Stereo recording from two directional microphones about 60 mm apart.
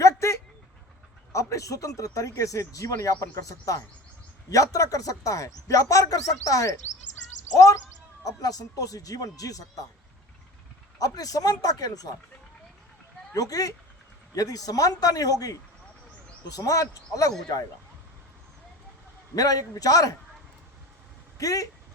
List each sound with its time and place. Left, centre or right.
0.0 s a sound: left
1.3 s speech: left
8.2 s speech: left
11.0 s speech: left
13.3 s speech: left
19.4 s speech: left
21.3 s speech: left